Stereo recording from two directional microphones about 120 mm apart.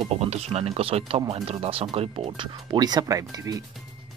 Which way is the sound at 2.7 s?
35° right (ahead or behind).